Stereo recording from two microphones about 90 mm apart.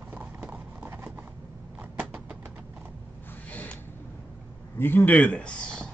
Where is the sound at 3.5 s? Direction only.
15° left (ahead or behind).